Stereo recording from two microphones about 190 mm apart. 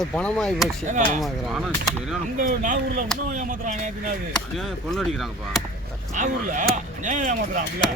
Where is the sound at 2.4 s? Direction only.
45° right (ahead or behind).